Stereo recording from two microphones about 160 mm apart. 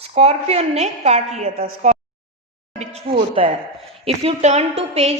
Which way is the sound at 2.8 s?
40° right (ahead or behind).